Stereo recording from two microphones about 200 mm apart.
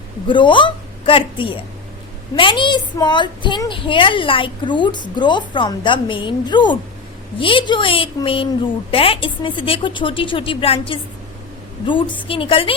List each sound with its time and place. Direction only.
0.3 s a woman's voice: 25° left (ahead or behind)